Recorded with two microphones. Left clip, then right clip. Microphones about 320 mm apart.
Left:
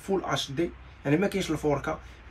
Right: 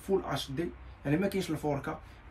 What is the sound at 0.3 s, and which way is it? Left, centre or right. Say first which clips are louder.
Speech: left 6 dB; centre.